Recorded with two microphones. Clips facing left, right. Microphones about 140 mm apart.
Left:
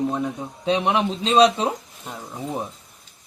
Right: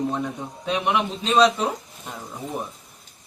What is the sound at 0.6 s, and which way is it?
Speech, 30° left (ahead or behind).